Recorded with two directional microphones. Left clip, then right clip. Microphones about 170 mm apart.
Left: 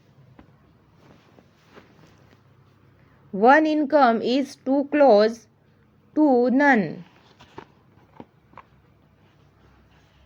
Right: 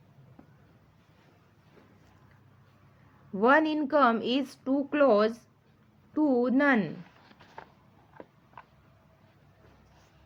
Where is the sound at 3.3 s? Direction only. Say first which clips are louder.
Left 7 dB; 20° left (ahead or behind).